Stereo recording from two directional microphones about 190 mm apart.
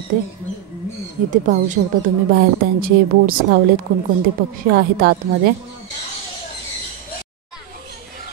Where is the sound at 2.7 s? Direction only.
50° right (ahead or behind).